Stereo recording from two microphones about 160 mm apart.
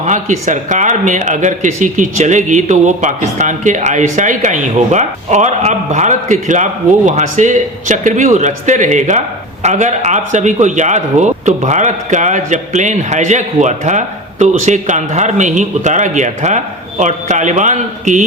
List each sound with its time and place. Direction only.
0.0 s speech: 50° right (ahead or behind)